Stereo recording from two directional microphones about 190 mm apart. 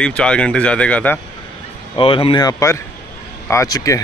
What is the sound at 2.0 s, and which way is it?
Speech, 30° left (ahead or behind).